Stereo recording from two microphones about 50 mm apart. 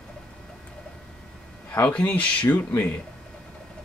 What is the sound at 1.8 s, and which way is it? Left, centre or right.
Speech, left.